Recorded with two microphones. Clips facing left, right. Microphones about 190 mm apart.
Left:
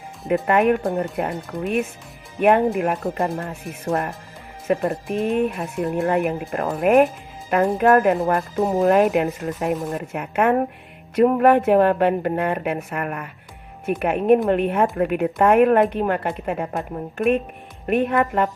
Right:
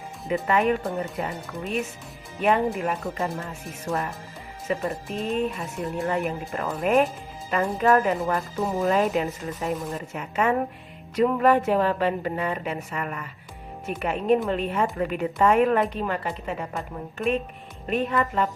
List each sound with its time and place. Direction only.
0.4 s a woman's voice: 55° left (ahead or behind)